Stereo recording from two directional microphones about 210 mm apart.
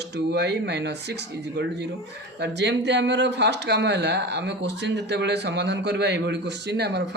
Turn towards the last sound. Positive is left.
turn(degrees=-50)  # may be behind; listen again after turning